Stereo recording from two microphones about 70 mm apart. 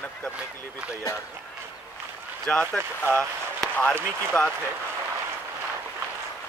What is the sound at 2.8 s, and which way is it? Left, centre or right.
Speech, right.